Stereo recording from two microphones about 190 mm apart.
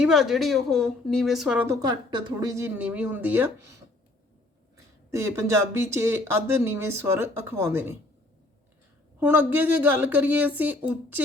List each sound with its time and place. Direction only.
0.0 s a woman's voice: centre (ahead or behind)
5.1 s a woman's voice: 15° right (ahead or behind)
9.2 s a woman's voice: 10° right (ahead or behind)